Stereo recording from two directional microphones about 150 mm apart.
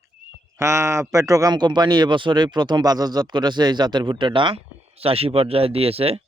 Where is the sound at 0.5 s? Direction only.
15° right (ahead or behind).